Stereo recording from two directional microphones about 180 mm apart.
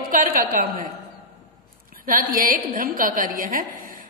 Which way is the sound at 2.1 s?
50° right (ahead or behind).